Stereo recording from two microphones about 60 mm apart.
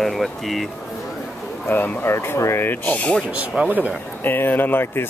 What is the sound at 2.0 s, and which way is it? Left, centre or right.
Speech, left.